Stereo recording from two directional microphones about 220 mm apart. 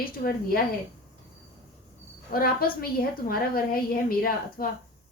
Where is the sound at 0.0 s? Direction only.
40° left (ahead or behind).